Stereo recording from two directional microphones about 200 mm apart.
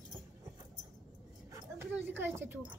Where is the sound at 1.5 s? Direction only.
15° right (ahead or behind).